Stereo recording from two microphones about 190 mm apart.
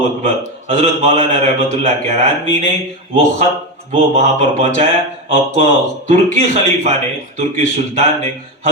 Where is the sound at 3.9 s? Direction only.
35° right (ahead or behind).